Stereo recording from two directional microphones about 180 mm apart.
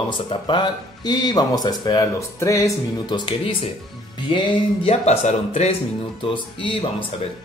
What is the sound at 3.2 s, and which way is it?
Speech, 30° left (ahead or behind).